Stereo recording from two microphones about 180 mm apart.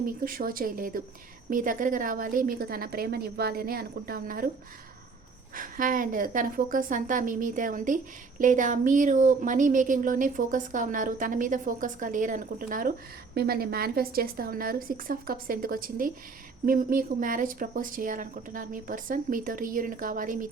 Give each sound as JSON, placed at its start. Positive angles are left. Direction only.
{"t": 0.0, "sound": "a woman's voice", "side_deg": -50}
{"t": 5.5, "sound": "a woman's voice", "side_deg": -50}